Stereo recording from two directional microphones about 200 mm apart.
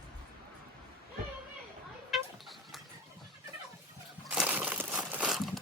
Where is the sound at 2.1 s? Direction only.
Centre (ahead or behind).